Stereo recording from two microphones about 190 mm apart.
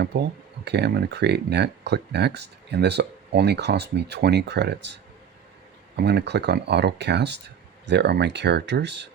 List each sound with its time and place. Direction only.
0.0 s speech: 60° right (ahead or behind)
6.0 s speech: 60° right (ahead or behind)